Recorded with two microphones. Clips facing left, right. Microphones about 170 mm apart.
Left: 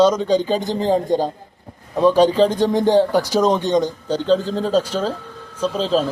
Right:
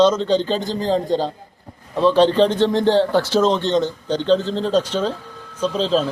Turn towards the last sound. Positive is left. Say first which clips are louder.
# even
turn(degrees=5)  # may be behind; listen again after turning